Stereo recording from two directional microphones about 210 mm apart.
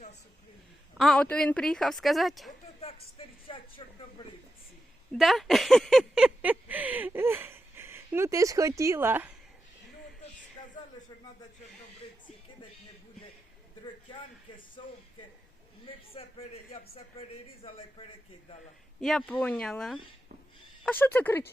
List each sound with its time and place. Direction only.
0.9 s speech: 5° left (ahead or behind)
2.8 s speech: 25° left (ahead or behind)
5.1 s speech: centre (ahead or behind)
10.6 s a sound: 20° left (ahead or behind)
14.1 s a man's voice: 25° left (ahead or behind)
16.1 s a man's voice: 30° left (ahead or behind)
18.9 s speech: centre (ahead or behind)